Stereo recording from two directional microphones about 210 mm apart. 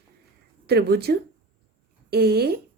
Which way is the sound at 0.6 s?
50° right (ahead or behind).